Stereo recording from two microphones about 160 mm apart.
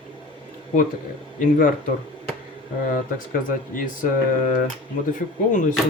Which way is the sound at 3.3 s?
60° left (ahead or behind).